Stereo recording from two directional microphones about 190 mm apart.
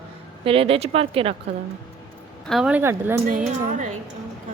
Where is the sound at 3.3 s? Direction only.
45° right (ahead or behind).